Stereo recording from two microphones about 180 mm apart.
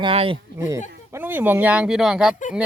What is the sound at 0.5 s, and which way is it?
Speech, 15° right (ahead or behind).